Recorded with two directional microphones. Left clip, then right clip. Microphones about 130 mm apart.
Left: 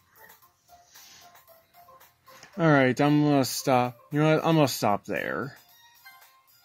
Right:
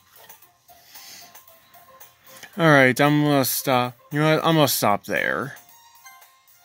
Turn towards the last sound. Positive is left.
turn(degrees=-35)  # may be behind; listen again after turning